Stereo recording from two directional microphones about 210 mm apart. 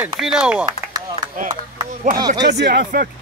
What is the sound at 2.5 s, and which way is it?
Speech, 50° right (ahead or behind).